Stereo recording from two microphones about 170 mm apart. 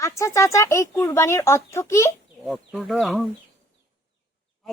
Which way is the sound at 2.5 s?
Centre (ahead or behind).